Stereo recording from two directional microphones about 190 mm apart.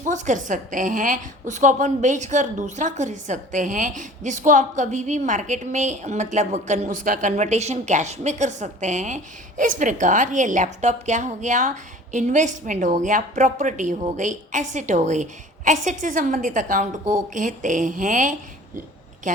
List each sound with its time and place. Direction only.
0.0 s a woman's voice: 40° right (ahead or behind)